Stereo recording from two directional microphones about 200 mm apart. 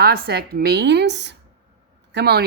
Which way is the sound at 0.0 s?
50° right (ahead or behind).